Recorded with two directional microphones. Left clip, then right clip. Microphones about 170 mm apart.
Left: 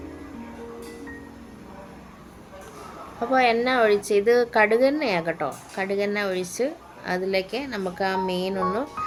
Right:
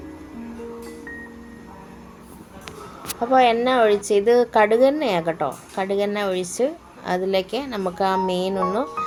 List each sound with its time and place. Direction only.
3.3 s a woman's voice: 10° right (ahead or behind)